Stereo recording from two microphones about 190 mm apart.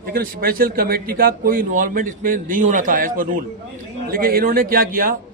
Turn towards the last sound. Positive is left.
turn(degrees=-45)  # may be behind; listen again after turning